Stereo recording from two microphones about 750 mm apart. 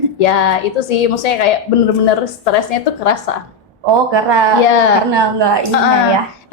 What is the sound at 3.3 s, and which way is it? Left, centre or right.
Speech, left.